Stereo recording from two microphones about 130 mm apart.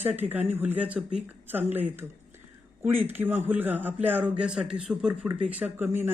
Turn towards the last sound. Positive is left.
turn(degrees=-15)  # may be behind; listen again after turning